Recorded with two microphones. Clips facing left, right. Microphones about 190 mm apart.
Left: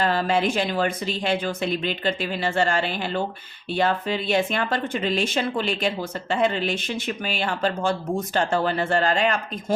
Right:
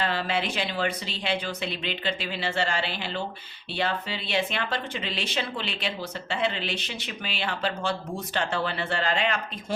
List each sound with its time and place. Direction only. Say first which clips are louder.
0.0 s speech: left 6 dB; 45° left (ahead or behind)